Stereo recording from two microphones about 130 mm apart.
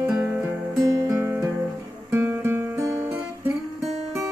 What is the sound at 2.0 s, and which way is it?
Guitar, 20° right (ahead or behind).